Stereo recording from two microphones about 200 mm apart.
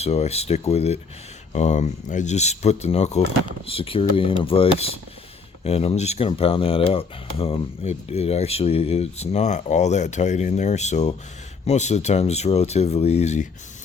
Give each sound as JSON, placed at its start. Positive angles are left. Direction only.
{"t": 0.0, "sound": "speech", "side_deg": 30}